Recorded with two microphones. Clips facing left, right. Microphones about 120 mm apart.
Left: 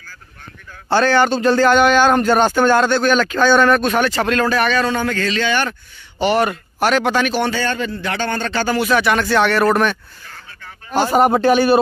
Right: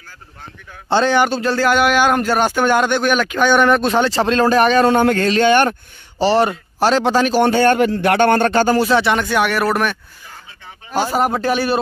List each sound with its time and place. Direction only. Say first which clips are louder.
0.8 s a man's voice: even; 20° right (ahead or behind)
1.3 s speech: left 3 dB; 5° right (ahead or behind); by 4.5 s 30° right (ahead or behind)
4.5 s speech: right 5 dB; 40° right (ahead or behind)
6.1 s speech: right 2 dB; 30° right (ahead or behind)
7.4 s speech: right 7 dB; 55° right (ahead or behind)
8.8 s a man's voice: right 1 dB; 25° right (ahead or behind); by 11.8 s centre (ahead or behind)